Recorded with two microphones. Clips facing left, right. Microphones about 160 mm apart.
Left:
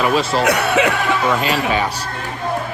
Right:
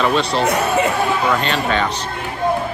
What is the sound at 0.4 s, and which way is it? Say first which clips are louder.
Chuckle: left 1 dB; 80° left.